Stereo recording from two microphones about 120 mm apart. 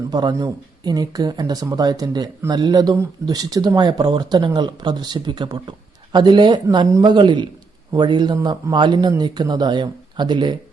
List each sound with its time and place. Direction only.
0.1 s speech: 35° right (ahead or behind)